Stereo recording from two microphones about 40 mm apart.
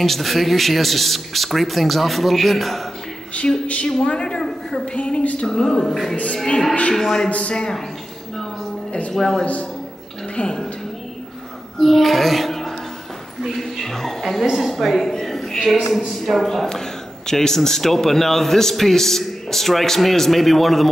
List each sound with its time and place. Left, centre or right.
0.0 s a man's voice: centre
4.0 s a woman's voice: left
4.4 s a sound: centre
4.9 s speech: left
5.5 s speech: centre
6.3 s a woman's voice: centre
7.2 s a woman's voice: left
9.1 s speech: centre
9.4 s speech: left
10.3 s a woman's voice: left
11.8 s speech: centre
14.4 s a woman's voice: centre
17.3 s a man's voice: centre